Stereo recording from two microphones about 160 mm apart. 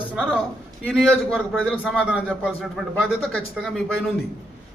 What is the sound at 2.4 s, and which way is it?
A man's voice, 5° right (ahead or behind).